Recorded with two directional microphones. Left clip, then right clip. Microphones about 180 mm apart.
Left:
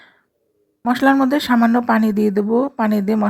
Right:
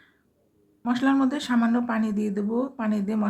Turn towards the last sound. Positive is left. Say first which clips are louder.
# left 10 dB
turn(degrees=45)  # may be behind; listen again after turning